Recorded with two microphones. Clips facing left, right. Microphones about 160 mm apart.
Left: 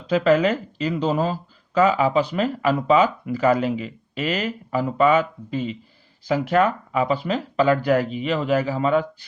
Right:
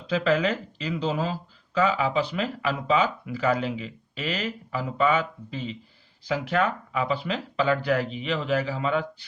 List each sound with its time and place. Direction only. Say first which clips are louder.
0.1 s speech: left 6 dB; 45° left (ahead or behind)